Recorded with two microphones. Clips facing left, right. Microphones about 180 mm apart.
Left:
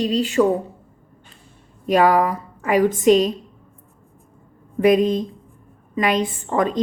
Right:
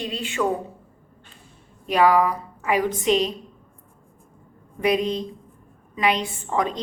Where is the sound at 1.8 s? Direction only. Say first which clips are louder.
Left 2 dB; 45° left (ahead or behind).